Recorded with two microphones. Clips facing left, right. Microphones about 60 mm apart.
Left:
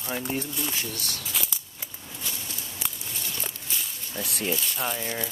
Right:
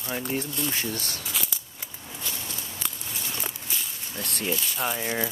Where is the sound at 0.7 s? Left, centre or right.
Right.